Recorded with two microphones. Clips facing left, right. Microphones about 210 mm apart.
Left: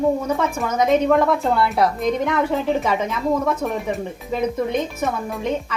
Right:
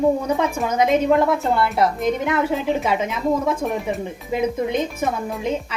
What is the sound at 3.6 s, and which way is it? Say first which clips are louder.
Speech: even; 15° right (ahead or behind).